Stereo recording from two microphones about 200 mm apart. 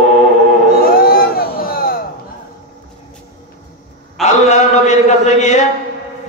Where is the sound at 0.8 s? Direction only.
50° left (ahead or behind).